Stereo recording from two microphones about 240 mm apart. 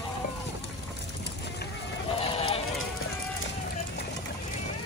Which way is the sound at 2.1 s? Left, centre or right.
Left.